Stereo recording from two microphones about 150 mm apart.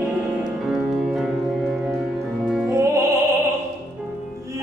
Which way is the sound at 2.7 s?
20° right (ahead or behind).